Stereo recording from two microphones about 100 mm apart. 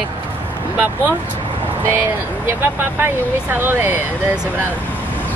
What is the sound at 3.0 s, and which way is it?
Speech, 20° right (ahead or behind).